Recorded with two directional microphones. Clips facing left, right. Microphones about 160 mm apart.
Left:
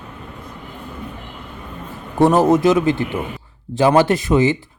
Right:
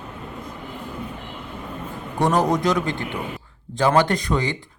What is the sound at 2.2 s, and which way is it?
Speech, 25° left (ahead or behind).